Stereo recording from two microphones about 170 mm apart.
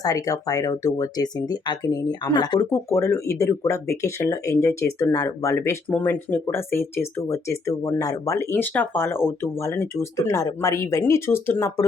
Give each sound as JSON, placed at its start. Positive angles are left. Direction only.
{"t": 0.0, "sound": "speech", "side_deg": 20}